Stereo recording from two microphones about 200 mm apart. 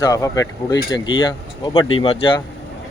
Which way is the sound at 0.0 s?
15° left (ahead or behind).